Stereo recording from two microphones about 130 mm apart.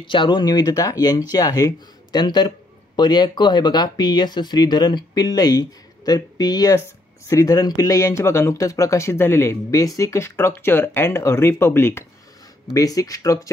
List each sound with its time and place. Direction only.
0.0 s speech: 35° left (ahead or behind); by 12.0 s 15° left (ahead or behind)
12.7 s speech: 30° left (ahead or behind)